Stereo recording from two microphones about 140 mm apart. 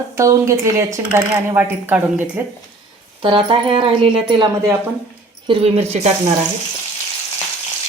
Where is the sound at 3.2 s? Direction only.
35° right (ahead or behind).